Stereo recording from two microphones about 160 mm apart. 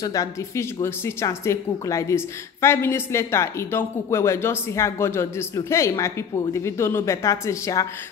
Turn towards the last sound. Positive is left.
turn(degrees=20)  # may be behind; listen again after turning